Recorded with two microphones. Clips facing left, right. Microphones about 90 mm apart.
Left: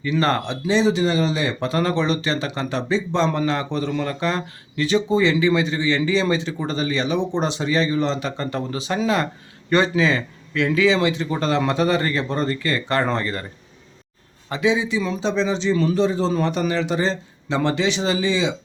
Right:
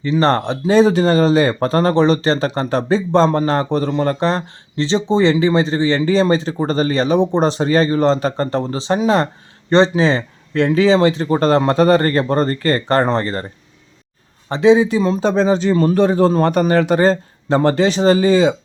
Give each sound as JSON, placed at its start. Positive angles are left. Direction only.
{"t": 0.0, "sound": "speech", "side_deg": -30}
{"t": 14.5, "sound": "speech", "side_deg": -35}